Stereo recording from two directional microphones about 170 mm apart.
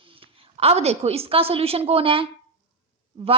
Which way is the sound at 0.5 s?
35° right (ahead or behind).